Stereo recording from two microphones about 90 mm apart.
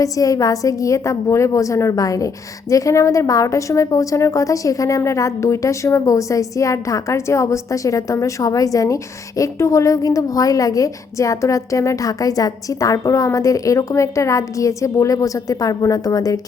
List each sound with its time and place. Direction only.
0.0 s a woman's voice: 40° left (ahead or behind)